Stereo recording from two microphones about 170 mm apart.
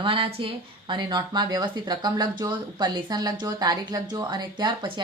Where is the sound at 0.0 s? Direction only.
30° right (ahead or behind).